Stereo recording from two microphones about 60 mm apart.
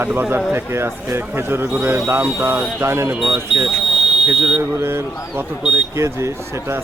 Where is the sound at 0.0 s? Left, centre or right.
Right.